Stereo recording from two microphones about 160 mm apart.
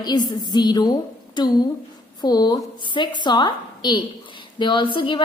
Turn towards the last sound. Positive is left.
turn(degrees=30)  # may be behind; listen again after turning